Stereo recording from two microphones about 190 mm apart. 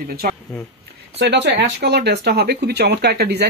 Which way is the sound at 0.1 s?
50° right (ahead or behind).